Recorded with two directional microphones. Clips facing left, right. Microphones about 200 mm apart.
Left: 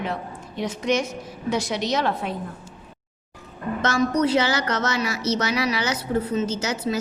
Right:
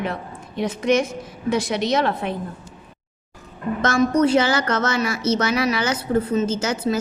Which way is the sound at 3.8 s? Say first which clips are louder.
Right 3 dB; 50° right (ahead or behind).